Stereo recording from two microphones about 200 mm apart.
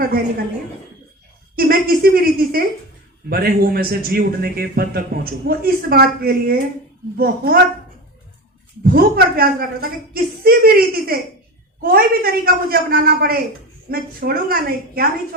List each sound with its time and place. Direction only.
1.5 s a man's voice: 50° right (ahead or behind)
8.8 s a man's voice: 50° right (ahead or behind)